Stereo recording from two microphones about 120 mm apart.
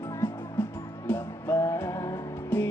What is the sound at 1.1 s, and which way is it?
Music, 20° left (ahead or behind).